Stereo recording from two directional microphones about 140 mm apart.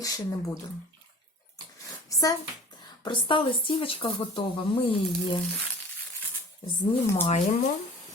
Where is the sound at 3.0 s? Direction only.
35° left (ahead or behind).